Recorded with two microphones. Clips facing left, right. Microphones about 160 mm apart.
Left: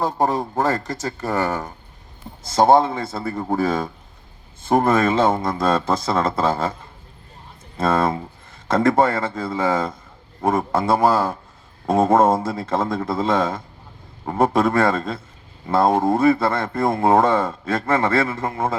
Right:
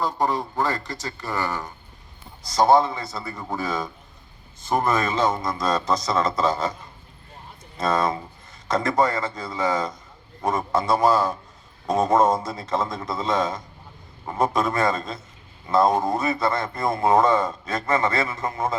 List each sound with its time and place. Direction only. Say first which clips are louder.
0.0 s speech: left 3 dB; 50° left (ahead or behind)
5.8 s a man's voice: left 2 dB; 30° left (ahead or behind)
6.1 s speech: left 2 dB; 55° left (ahead or behind)
8.8 s speech: left 6 dB; 55° left (ahead or behind)